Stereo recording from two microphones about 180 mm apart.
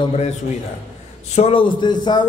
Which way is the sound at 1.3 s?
30° left (ahead or behind).